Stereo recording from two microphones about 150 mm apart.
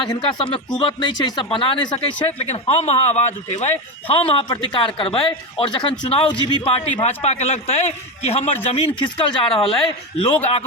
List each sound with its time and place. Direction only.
0.1 s speech: 35° left (ahead or behind)